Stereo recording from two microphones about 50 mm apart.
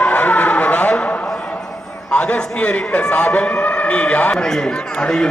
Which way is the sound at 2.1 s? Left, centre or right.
Left.